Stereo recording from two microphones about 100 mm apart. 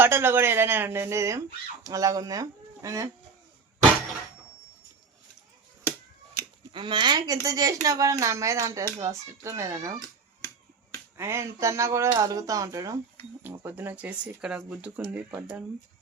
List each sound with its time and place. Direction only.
0.0 s speech: 20° right (ahead or behind)
6.7 s speech: 50° right (ahead or behind); by 9.9 s 30° right (ahead or behind)
11.2 s speech: 25° right (ahead or behind)
13.7 s speech: 20° right (ahead or behind)